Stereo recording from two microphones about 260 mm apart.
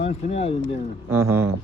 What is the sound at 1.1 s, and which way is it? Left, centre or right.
Speech, centre.